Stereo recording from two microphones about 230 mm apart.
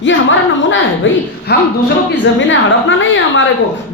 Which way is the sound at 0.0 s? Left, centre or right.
Left.